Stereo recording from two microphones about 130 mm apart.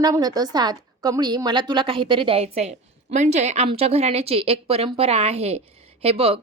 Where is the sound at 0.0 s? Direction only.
30° right (ahead or behind).